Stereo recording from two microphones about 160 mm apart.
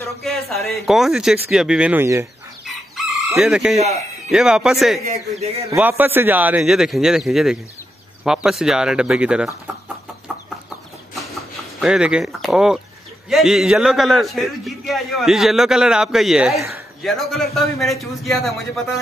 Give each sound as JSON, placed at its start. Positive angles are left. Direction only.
{"t": 0.2, "sound": "a man's voice", "side_deg": 0}
{"t": 2.6, "sound": "chicken", "side_deg": 0}
{"t": 4.3, "sound": "a man's voice", "side_deg": -5}
{"t": 5.4, "sound": "a man's voice", "side_deg": -40}
{"t": 5.7, "sound": "a man's voice", "side_deg": -10}
{"t": 11.8, "sound": "a man's voice", "side_deg": -5}